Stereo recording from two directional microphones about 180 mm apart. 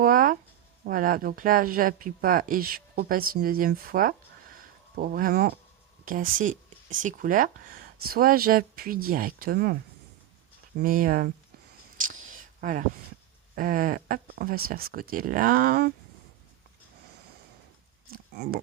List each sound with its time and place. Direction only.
0.0 s a sound: 50° right (ahead or behind)
0.9 s speech: 50° right (ahead or behind)
10.8 s speech: 55° right (ahead or behind)
12.0 s a sound: 45° right (ahead or behind)
13.6 s speech: 50° right (ahead or behind)
18.1 s oink: 55° right (ahead or behind)